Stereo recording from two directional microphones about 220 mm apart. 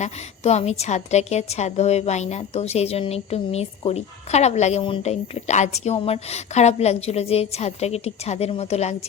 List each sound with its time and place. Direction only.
0.0 s a woman's voice: 30° left (ahead or behind)